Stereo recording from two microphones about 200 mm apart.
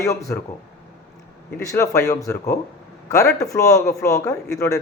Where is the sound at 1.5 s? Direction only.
15° left (ahead or behind).